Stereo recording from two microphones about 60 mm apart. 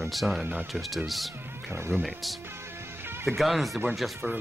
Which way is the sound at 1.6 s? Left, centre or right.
Right.